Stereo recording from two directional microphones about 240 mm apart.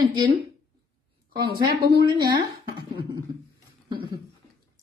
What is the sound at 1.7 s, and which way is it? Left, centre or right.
Speech, right.